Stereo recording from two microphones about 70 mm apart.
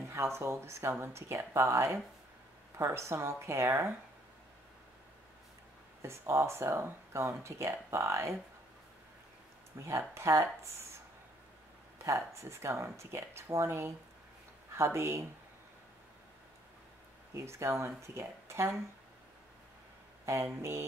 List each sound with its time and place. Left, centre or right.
0.1 s speech: right
6.0 s speech: right
9.8 s speech: right
12.0 s speech: right
17.3 s speech: right
20.2 s speech: right